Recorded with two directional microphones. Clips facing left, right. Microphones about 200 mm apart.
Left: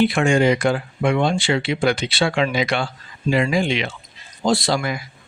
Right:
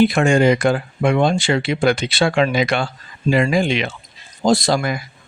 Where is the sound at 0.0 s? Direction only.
40° right (ahead or behind).